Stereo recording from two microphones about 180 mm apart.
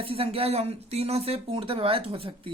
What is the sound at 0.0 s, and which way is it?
Speech, 30° right (ahead or behind).